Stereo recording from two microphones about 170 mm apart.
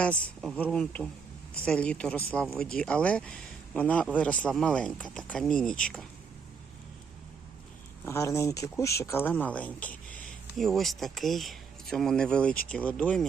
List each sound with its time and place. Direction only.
0.0 s speech: 5° left (ahead or behind)
8.0 s speech: 15° left (ahead or behind)